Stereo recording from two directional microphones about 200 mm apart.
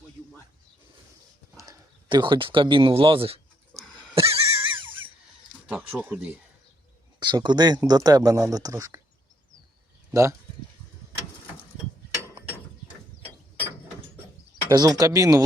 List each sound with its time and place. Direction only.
1.5 s a sound: 20° right (ahead or behind)
5.6 s speech: 5° right (ahead or behind)
7.2 s speech: 20° right (ahead or behind)
10.1 s speech: 15° right (ahead or behind)
14.7 s speech: 20° right (ahead or behind)